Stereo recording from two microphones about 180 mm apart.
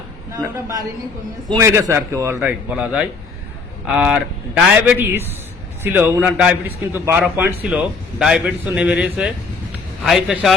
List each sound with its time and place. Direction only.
0.3 s a man's voice: 20° right (ahead or behind); by 10.5 s 5° right (ahead or behind)